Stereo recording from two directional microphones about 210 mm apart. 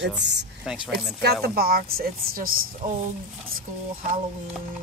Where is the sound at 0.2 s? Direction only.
55° right (ahead or behind).